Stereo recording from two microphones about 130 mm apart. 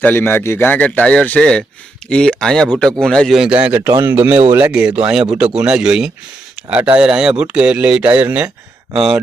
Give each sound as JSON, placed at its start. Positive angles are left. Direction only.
{"t": 0.0, "sound": "a man's voice", "side_deg": 15}